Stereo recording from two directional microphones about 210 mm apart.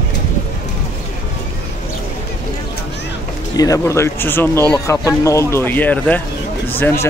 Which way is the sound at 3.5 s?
15° left (ahead or behind).